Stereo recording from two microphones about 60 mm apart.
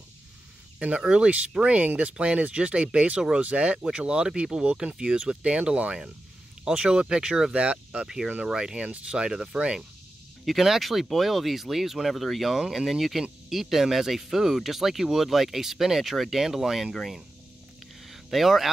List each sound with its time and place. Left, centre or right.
0.7 s speech: right
10.4 s speech: centre
18.0 s a sound: centre